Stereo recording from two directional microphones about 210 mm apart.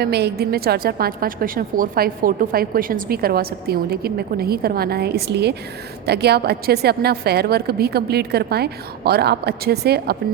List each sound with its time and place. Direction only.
0.0 s a woman's voice: 50° right (ahead or behind)